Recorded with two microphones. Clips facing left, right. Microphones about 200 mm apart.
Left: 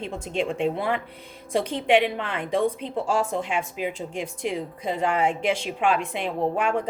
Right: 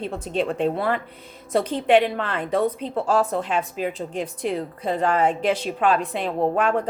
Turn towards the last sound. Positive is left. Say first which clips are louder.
# right 3 dB
turn(degrees=10)  # may be behind; listen again after turning